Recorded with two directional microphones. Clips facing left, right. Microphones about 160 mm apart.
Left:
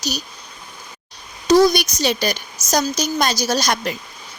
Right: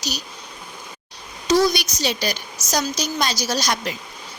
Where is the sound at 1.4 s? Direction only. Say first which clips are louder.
Left 5 dB; 45° left (ahead or behind).